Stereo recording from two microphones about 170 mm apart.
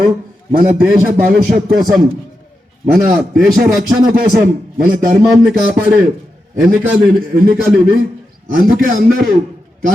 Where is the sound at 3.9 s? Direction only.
55° right (ahead or behind).